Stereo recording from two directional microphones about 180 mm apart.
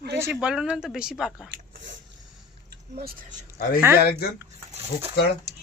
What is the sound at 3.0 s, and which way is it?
Speech, 55° right (ahead or behind).